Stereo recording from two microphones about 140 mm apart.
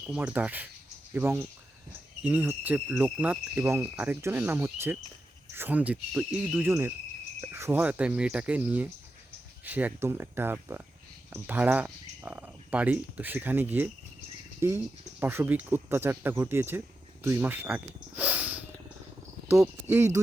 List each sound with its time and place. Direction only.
0.0 s cricket: 10° right (ahead or behind)
14.6 s speech: 20° right (ahead or behind)
15.2 s cricket: 15° right (ahead or behind)
17.2 s speech: 15° right (ahead or behind)